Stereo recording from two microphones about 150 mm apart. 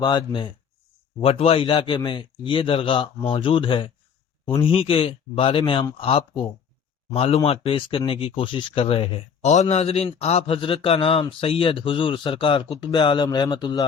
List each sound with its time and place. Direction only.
0.0 s speech: 30° left (ahead or behind)